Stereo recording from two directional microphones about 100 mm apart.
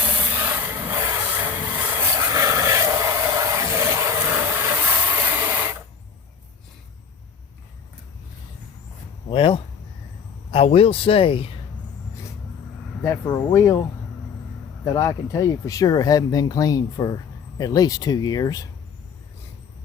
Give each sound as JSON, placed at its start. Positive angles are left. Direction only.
{"t": 0.2, "sound": "vehicle", "side_deg": -20}
{"t": 5.1, "sound": "a sound", "side_deg": -25}
{"t": 9.3, "sound": "a sound", "side_deg": 70}
{"t": 10.5, "sound": "speech", "side_deg": 75}
{"t": 13.1, "sound": "speech", "side_deg": 30}
{"t": 14.9, "sound": "speech", "side_deg": 30}